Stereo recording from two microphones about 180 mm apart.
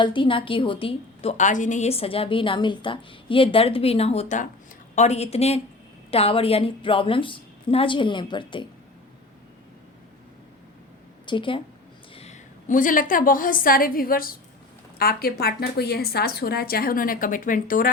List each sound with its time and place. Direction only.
0.0 s a woman's voice: 25° left (ahead or behind)
11.3 s a woman's voice: 30° left (ahead or behind); by 17.9 s 50° left (ahead or behind)